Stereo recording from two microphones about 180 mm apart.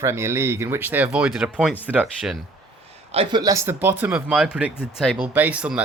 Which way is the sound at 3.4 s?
15° right (ahead or behind).